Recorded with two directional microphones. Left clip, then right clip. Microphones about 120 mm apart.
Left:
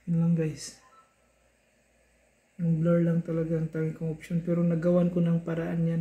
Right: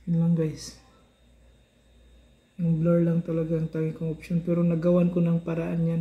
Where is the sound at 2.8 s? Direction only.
10° left (ahead or behind).